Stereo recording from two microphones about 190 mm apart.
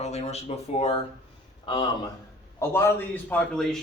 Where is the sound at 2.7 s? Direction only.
15° left (ahead or behind).